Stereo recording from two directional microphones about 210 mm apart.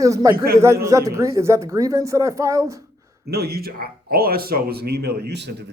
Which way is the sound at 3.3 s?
50° right (ahead or behind).